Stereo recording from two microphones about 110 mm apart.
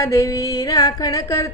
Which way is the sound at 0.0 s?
25° left (ahead or behind).